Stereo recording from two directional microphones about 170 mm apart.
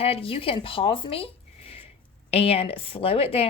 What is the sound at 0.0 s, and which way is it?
A woman's voice, 35° left (ahead or behind).